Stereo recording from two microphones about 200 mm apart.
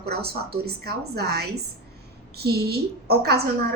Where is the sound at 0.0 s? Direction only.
50° right (ahead or behind).